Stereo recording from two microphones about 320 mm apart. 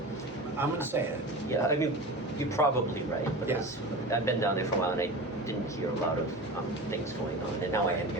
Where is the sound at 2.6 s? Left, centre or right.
Centre.